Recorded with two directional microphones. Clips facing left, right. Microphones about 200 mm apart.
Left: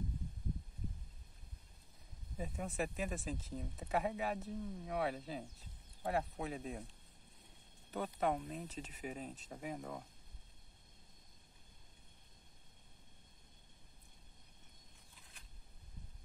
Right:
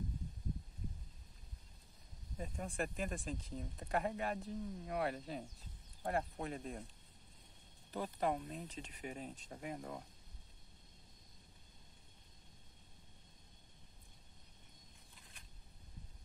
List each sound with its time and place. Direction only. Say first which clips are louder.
2.3 s speech: left 1 dB; 5° left (ahead or behind)
7.9 s speech: left 1 dB; centre (ahead or behind)